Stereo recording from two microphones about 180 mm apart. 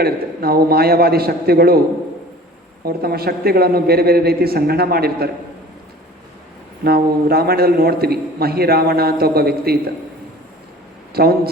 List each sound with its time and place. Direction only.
0.0 s a man's voice: 60° right (ahead or behind)
2.8 s a man's voice: 60° right (ahead or behind)
6.8 s a man's voice: 60° right (ahead or behind)
11.1 s speech: 60° right (ahead or behind)